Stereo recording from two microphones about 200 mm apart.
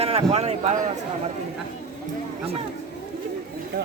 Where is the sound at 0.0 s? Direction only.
30° right (ahead or behind).